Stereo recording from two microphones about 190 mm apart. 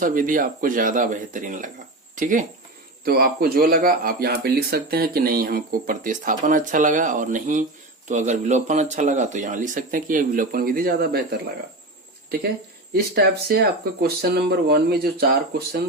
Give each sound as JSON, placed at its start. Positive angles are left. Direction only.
{"t": 0.0, "sound": "speech", "side_deg": -45}
{"t": 3.0, "sound": "speech", "side_deg": -55}
{"t": 12.9, "sound": "speech", "side_deg": -55}